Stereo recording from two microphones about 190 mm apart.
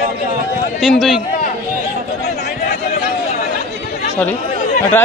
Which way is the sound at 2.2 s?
55° left (ahead or behind).